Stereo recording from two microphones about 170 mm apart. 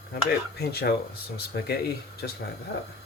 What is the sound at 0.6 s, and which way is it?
Speech, 70° left (ahead or behind).